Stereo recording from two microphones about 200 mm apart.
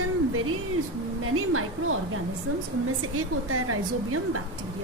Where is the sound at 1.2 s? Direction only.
90° right.